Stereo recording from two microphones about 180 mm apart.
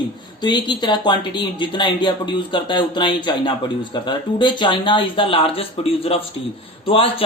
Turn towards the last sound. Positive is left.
turn(degrees=30)  # may be behind; listen again after turning